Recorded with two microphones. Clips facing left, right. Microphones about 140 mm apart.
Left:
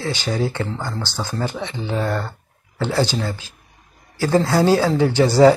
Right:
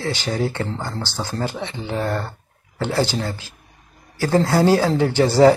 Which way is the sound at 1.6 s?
20° left (ahead or behind).